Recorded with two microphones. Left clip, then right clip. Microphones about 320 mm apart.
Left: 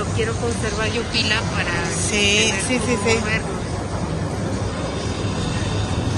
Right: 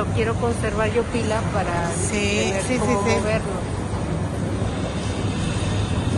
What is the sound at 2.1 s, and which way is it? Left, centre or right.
Speech, centre.